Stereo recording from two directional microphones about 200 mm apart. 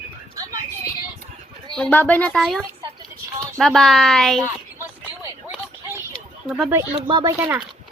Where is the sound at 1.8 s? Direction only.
5° left (ahead or behind).